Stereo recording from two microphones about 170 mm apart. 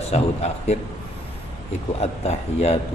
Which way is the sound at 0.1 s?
40° left (ahead or behind).